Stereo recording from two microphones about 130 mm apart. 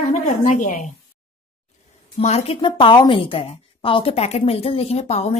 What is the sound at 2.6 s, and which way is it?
A woman's voice, 40° left (ahead or behind).